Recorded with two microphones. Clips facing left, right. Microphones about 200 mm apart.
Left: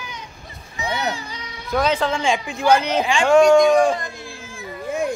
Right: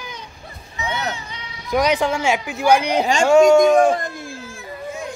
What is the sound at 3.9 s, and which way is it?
Music, 50° right (ahead or behind).